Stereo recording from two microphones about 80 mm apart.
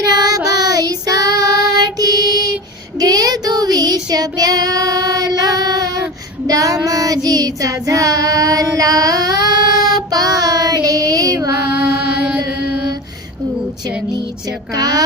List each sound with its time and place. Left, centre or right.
0.0 s child singing: right
11.9 s music: centre
14.7 s a woman's voice: right